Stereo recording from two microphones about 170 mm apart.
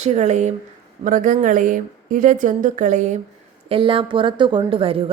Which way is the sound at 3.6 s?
30° right (ahead or behind).